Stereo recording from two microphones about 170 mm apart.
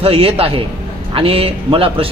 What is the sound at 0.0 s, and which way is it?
Speech, 35° right (ahead or behind).